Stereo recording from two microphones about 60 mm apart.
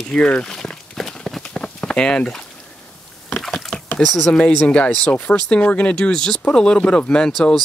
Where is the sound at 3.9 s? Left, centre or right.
Centre.